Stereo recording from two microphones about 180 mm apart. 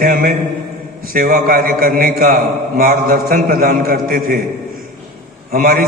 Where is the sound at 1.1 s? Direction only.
50° right (ahead or behind).